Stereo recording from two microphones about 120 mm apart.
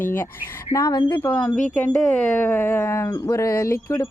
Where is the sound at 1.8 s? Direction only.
10° left (ahead or behind).